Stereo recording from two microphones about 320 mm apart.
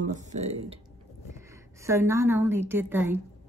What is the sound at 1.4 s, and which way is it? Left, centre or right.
A woman's voice, centre.